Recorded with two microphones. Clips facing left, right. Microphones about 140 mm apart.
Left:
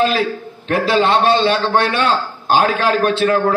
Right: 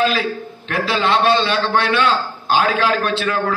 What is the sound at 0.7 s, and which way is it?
A man's voice, 40° left (ahead or behind).